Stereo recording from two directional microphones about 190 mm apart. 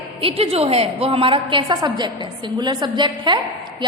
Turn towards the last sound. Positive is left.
turn(degrees=-25)  # may be behind; listen again after turning